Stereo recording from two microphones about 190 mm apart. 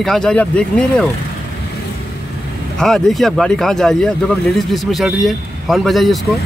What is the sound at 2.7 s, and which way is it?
Speech, centre (ahead or behind).